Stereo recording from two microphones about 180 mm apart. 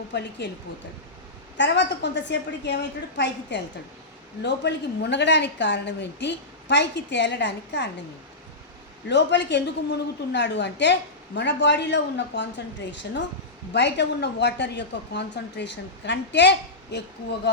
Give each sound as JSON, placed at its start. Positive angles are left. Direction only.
{"t": 0.1, "sound": "a woman's voice", "side_deg": 70}
{"t": 1.5, "sound": "a woman's voice", "side_deg": 80}
{"t": 9.0, "sound": "a woman's voice", "side_deg": 75}